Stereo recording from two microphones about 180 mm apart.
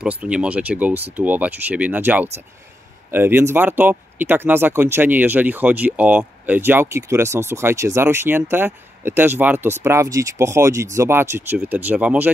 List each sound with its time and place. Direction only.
0.0 s speech: 5° right (ahead or behind)